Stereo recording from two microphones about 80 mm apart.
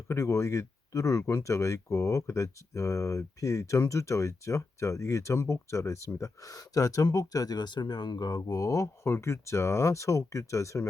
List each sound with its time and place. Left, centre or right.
0.1 s speech: left
8.4 s speech: left